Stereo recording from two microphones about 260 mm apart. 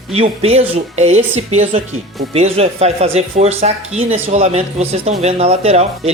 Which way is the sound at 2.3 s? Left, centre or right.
Right.